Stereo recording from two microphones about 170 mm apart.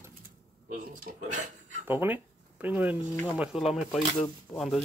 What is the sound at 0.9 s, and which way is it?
Speech, 55° right (ahead or behind).